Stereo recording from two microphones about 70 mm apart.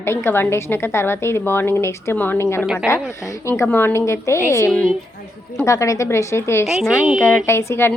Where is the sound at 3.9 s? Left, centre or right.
Left.